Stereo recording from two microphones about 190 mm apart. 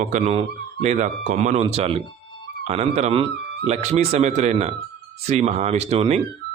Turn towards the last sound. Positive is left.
turn(degrees=-35)  # may be behind; listen again after turning